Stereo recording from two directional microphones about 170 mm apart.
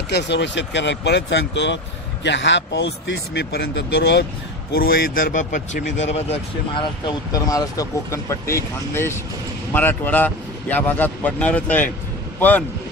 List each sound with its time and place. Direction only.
0.1 s speech: 90° left
4.7 s a man's voice: 60° left (ahead or behind); by 6.9 s 40° left (ahead or behind)
7.1 s speech: 20° left (ahead or behind)